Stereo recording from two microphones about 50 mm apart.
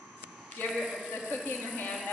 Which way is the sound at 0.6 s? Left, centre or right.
Left.